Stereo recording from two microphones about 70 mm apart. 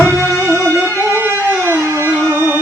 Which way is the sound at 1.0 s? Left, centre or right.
Right.